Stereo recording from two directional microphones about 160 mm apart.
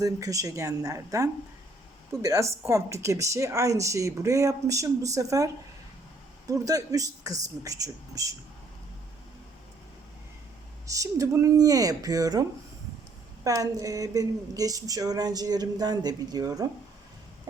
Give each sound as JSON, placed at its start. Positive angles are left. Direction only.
{"t": 0.0, "sound": "a woman's voice", "side_deg": -20}
{"t": 6.5, "sound": "a woman's voice", "side_deg": -20}
{"t": 10.8, "sound": "a woman's voice", "side_deg": -20}